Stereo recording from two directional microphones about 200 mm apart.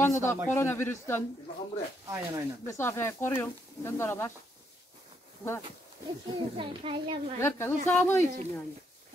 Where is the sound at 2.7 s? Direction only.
10° left (ahead or behind).